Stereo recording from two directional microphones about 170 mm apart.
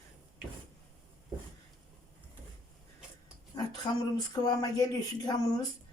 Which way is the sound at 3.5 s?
25° left (ahead or behind).